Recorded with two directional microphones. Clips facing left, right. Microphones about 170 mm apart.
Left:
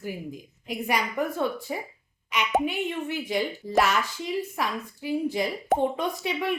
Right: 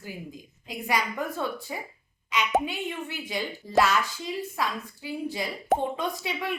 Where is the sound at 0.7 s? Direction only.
20° left (ahead or behind).